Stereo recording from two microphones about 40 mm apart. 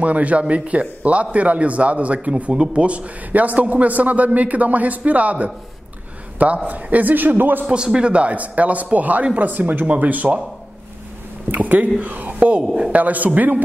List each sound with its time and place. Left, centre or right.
0.0 s a man's voice: right
2.5 s speech: centre
2.8 s a man's voice: right
7.6 s a man's voice: right
11.5 s a man's voice: right